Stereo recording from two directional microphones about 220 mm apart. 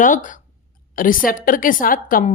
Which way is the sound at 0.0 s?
35° left (ahead or behind).